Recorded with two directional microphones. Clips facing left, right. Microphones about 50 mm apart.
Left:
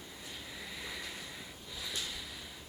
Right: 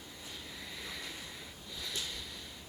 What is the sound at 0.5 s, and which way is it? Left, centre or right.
Vehicle, centre.